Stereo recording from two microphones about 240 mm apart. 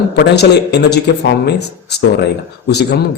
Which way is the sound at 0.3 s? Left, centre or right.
Left.